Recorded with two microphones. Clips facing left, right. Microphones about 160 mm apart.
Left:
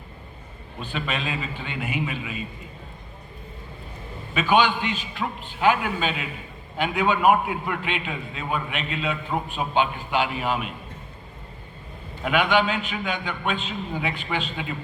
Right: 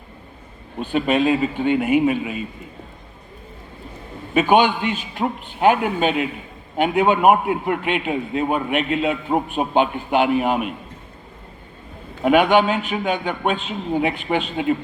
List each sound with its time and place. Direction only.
0.8 s a man's voice: 50° right (ahead or behind)
4.4 s a man's voice: 50° right (ahead or behind)
12.2 s a man's voice: 50° right (ahead or behind)